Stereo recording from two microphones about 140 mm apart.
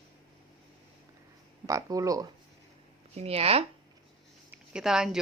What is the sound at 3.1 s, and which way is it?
Speech, 45° right (ahead or behind).